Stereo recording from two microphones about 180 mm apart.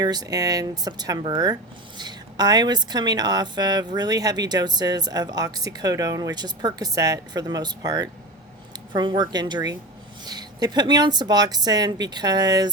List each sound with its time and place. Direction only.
0.0 s a woman's voice: 20° right (ahead or behind)